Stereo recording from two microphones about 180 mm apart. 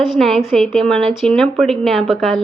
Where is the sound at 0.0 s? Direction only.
Centre (ahead or behind).